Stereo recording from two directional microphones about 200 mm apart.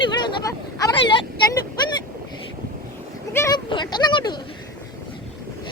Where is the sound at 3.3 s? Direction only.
15° left (ahead or behind).